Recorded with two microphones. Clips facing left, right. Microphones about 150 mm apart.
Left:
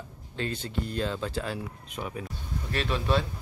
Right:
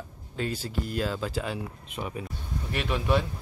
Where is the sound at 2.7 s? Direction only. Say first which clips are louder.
Right 1 dB; 15° right (ahead or behind).